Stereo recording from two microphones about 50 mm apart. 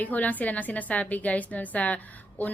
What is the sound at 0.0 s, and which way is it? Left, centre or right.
A woman's voice, left.